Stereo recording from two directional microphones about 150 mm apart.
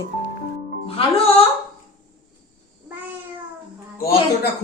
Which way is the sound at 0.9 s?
40° left (ahead or behind).